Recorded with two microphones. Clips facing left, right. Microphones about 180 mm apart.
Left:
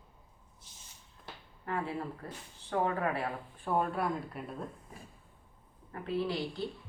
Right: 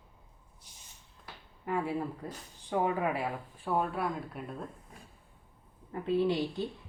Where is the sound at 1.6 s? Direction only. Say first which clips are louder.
Right 3 dB; 10° right (ahead or behind).